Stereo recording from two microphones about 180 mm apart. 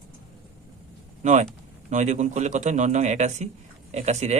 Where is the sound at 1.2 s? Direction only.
40° right (ahead or behind).